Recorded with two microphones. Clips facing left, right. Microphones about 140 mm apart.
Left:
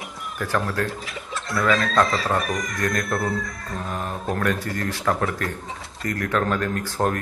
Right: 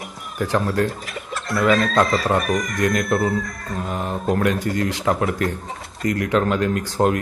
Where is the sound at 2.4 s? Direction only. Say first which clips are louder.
Right 5 dB; 50° right (ahead or behind).